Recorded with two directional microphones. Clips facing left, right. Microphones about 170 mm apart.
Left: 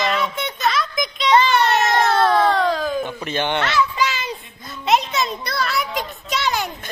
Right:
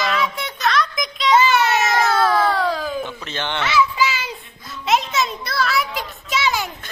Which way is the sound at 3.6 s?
Centre (ahead or behind).